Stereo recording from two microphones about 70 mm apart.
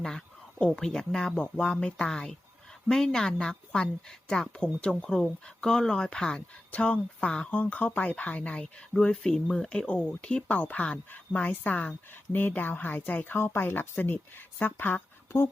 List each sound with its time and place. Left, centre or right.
0.6 s speech: centre; by 15.4 s left